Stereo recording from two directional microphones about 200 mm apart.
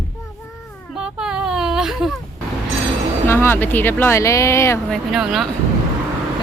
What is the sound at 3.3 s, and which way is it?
Speech, 10° left (ahead or behind).